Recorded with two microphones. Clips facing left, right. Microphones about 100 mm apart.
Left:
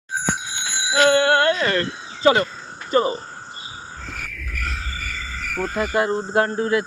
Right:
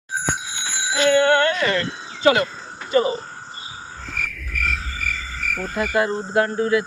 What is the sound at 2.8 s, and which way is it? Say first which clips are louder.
Speech: even; 35° left (ahead or behind).